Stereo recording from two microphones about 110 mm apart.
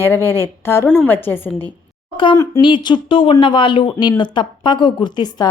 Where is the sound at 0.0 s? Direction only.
20° left (ahead or behind).